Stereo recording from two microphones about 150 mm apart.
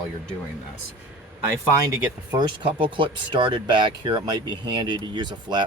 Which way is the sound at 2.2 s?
30° right (ahead or behind).